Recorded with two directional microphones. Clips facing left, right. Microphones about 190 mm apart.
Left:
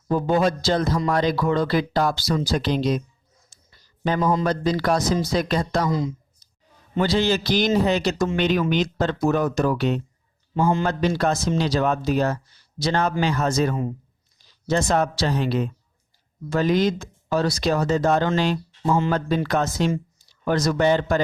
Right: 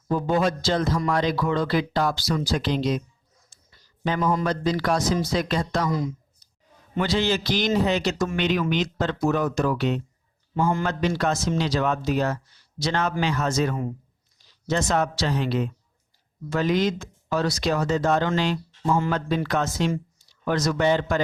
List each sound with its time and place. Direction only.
0.1 s speech: 40° left (ahead or behind)
4.0 s a man's voice: 40° left (ahead or behind)
6.9 s speech: 35° left (ahead or behind)
10.5 s a man's voice: 20° left (ahead or behind)
11.2 s speech: 35° left (ahead or behind)
18.9 s a man's voice: 25° left (ahead or behind)
19.5 s speech: 40° left (ahead or behind)